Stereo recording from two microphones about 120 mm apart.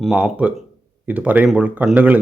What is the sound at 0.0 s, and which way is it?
Speech, centre (ahead or behind).